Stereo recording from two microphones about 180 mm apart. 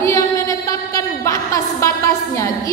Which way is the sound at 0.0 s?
15° left (ahead or behind).